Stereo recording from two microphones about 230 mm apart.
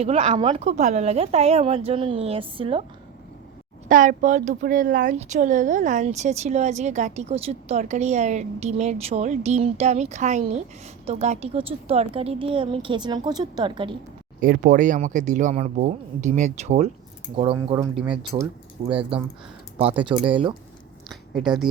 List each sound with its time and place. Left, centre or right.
0.0 s speech: right
3.8 s speech: right
14.4 s speech: right
21.1 s speech: centre